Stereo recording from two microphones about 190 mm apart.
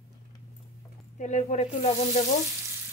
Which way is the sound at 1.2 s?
40° left (ahead or behind).